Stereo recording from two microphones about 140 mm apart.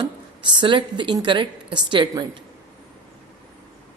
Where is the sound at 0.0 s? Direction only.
35° right (ahead or behind).